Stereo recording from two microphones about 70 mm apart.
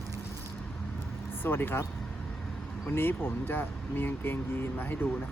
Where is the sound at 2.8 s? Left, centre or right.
Left.